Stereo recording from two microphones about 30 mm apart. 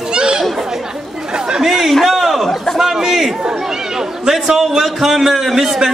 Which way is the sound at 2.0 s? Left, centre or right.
Centre.